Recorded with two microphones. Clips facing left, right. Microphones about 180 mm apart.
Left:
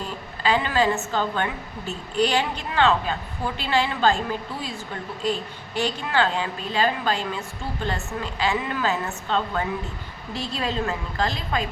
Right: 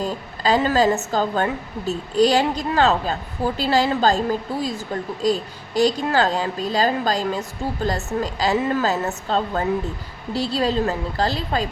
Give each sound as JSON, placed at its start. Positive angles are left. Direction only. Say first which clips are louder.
{"t": 0.0, "sound": "a woman's voice", "louder": "right 4 dB", "side_deg": -40}